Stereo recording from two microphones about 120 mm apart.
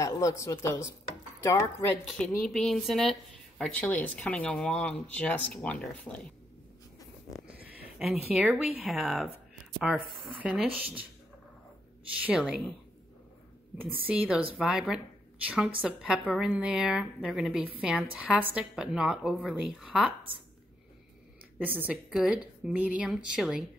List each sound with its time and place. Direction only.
0.0 s speech: 25° left (ahead or behind)
2.0 s a woman's voice: 5° left (ahead or behind)
7.2 s a sound: centre (ahead or behind)
7.5 s a sound: 15° right (ahead or behind)
8.0 s a woman's voice: 5° right (ahead or behind)
12.2 s a woman's voice: 10° right (ahead or behind)
14.0 s a woman's voice: 10° right (ahead or behind)
21.5 s a woman's voice: 15° right (ahead or behind)